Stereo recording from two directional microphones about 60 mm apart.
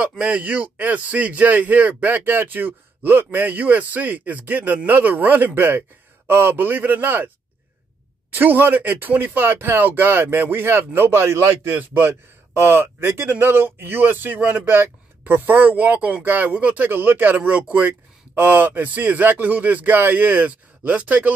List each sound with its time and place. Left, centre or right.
0.2 s a man's voice: right
8.3 s speech: right
11.6 s speech: right
12.0 s speech: right
18.3 s speech: right